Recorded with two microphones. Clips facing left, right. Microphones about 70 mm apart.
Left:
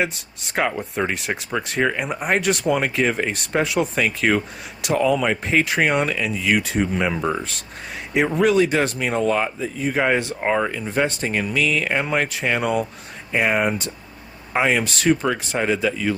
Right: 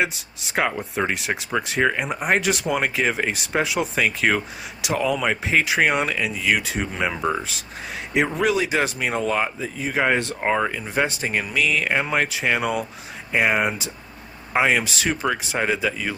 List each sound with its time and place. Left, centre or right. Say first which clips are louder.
0.0 s speech: even; centre